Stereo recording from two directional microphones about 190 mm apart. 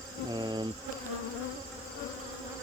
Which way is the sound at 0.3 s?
25° right (ahead or behind).